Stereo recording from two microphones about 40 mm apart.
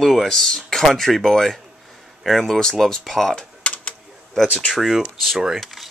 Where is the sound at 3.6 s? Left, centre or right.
Left.